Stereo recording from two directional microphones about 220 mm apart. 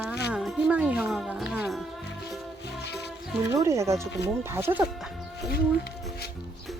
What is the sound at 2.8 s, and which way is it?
Music, 50° left (ahead or behind).